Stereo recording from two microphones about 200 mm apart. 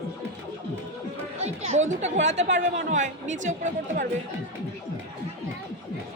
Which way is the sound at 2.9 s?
40° right (ahead or behind).